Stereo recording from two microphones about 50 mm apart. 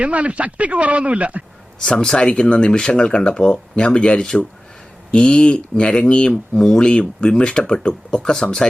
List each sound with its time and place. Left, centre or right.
0.0 s speech: right
1.8 s speech: centre
6.6 s speech: centre